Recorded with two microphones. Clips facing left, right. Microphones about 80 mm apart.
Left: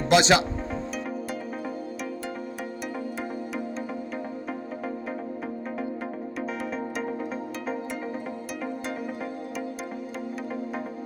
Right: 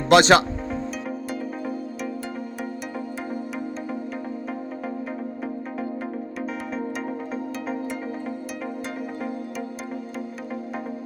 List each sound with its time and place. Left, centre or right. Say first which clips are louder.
0.1 s speech: right 5 dB; right
6.4 s music: right 1 dB; centre